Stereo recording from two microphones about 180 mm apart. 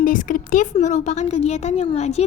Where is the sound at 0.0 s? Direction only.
45° left (ahead or behind).